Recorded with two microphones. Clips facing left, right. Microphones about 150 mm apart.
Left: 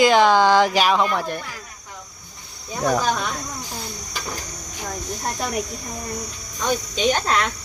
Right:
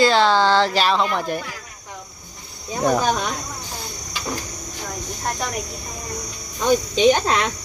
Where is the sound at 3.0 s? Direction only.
25° right (ahead or behind).